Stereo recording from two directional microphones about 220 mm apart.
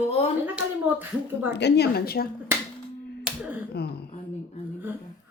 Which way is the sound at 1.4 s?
50° left (ahead or behind).